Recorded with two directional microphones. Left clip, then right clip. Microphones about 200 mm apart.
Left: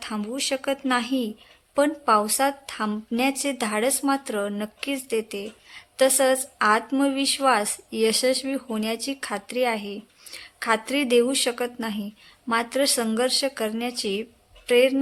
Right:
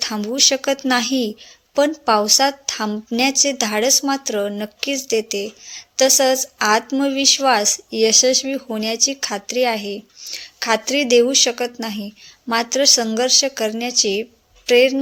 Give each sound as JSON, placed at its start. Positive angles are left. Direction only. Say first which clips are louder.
{"t": 0.0, "sound": "speech", "louder": "right 12 dB", "side_deg": -15}